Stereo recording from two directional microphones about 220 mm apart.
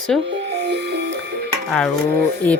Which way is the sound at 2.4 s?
5° left (ahead or behind).